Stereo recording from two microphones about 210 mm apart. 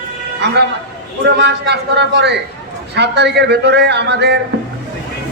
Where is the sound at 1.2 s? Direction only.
55° right (ahead or behind).